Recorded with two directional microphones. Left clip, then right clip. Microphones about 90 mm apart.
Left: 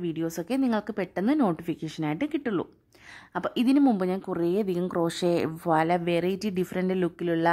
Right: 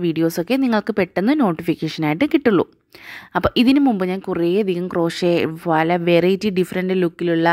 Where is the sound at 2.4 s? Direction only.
60° right (ahead or behind).